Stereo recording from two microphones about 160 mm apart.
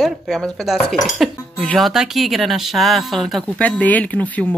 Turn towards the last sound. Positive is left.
turn(degrees=10)  # may be behind; listen again after turning